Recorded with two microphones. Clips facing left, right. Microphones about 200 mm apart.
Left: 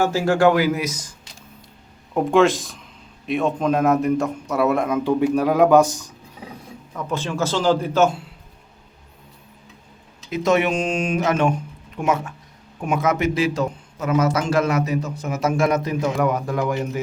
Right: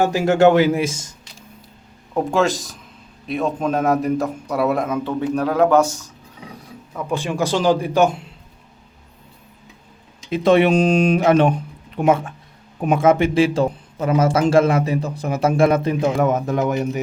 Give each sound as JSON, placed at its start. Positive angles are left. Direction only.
{"t": 0.0, "sound": "a man's voice", "side_deg": -20}
{"t": 2.1, "sound": "a man's voice", "side_deg": 0}
{"t": 5.0, "sound": "a man's voice", "side_deg": 10}
{"t": 6.9, "sound": "speech", "side_deg": -15}
{"t": 10.2, "sound": "a man's voice", "side_deg": -30}